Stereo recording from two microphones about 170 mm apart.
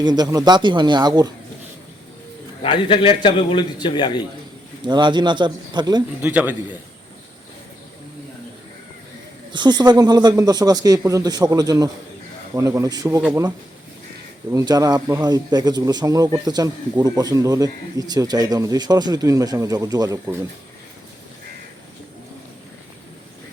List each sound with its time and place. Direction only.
0.0 s speech: 25° right (ahead or behind)
2.6 s a man's voice: 30° left (ahead or behind)
4.8 s speech: 25° right (ahead or behind)
6.2 s a man's voice: 10° right (ahead or behind)
9.5 s speech: 25° right (ahead or behind)
14.5 s speech: 20° right (ahead or behind)